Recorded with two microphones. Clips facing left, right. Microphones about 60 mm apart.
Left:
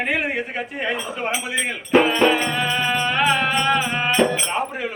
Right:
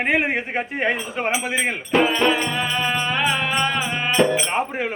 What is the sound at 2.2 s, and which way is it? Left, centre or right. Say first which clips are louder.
Music: left 2 dB; centre.